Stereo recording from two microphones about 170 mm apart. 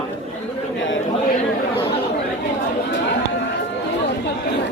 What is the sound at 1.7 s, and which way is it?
Chatter, 35° left (ahead or behind).